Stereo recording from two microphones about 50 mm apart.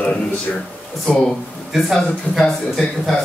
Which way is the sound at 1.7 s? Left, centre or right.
Centre.